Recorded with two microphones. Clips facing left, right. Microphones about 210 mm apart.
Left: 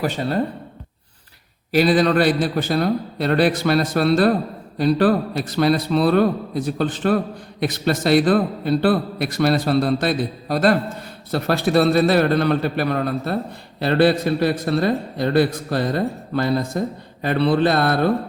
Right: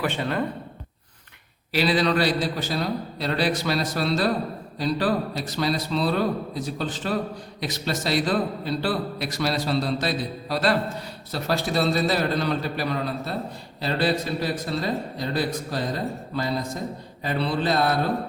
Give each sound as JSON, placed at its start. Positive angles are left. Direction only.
{"t": 0.0, "sound": "speech", "side_deg": 40}
{"t": 1.7, "sound": "a man's voice", "side_deg": 45}